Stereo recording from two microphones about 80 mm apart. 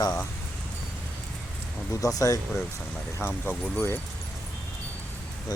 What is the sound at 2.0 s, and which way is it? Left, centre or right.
Speech, left.